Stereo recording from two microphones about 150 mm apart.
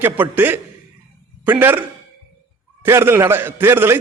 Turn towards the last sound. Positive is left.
turn(degrees=-15)  # may be behind; listen again after turning